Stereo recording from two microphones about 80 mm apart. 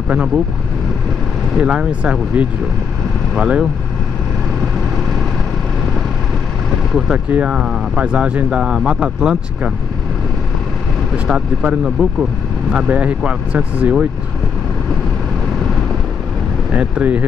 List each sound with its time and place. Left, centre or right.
1.6 s speech: centre
6.9 s speech: centre
7.2 s speech: centre
11.2 s speech: centre
16.7 s speech: centre